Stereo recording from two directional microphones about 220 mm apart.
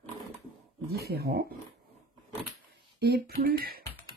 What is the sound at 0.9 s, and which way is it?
Speech, 45° right (ahead or behind).